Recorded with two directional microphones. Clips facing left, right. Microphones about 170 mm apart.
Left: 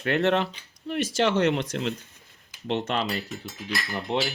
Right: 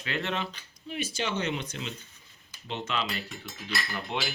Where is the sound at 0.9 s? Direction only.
90° left.